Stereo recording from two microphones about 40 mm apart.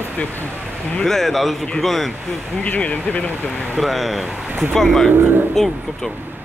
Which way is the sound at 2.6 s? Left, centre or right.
Left.